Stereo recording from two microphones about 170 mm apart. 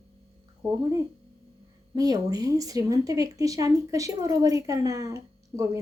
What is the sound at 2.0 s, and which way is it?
Speech, 20° right (ahead or behind).